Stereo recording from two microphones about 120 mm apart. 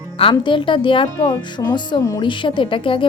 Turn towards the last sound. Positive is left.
turn(degrees=45)  # may be behind; listen again after turning